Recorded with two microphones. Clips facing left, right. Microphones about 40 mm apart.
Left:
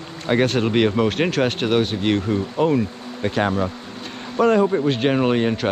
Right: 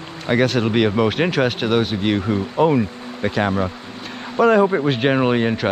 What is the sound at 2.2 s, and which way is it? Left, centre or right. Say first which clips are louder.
Speech: right 2 dB; centre.